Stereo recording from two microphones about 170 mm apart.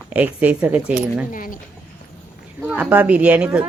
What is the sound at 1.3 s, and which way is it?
Speech, 55° left (ahead or behind).